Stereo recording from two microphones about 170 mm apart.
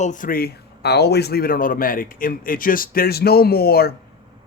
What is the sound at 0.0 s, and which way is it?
A man's voice, 50° left (ahead or behind).